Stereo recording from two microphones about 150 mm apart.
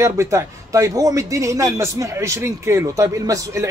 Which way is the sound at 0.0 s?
20° right (ahead or behind).